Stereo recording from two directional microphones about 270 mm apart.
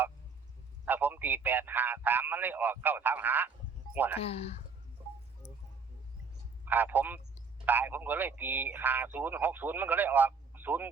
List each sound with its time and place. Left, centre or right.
0.9 s a man's voice: centre
4.2 s speech: left
5.4 s a sound: centre
6.7 s a man's voice: centre